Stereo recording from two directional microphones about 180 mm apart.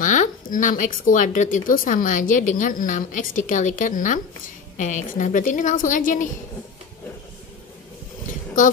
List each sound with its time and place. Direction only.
0.0 s a woman's voice: 45° left (ahead or behind)